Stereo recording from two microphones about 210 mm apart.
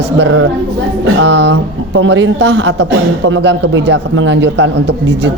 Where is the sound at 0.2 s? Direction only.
60° right (ahead or behind).